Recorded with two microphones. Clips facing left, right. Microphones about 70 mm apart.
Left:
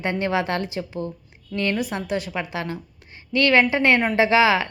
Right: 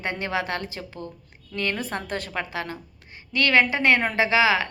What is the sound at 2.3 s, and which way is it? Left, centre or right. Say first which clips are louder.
Speech: left 2 dB; left.